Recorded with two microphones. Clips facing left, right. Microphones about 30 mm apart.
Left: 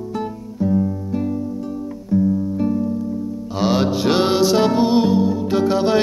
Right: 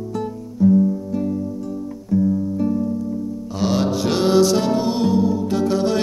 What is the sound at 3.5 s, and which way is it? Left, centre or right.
Music, left.